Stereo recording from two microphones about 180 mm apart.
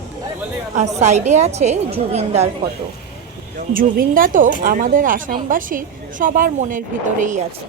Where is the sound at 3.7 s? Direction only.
50° right (ahead or behind).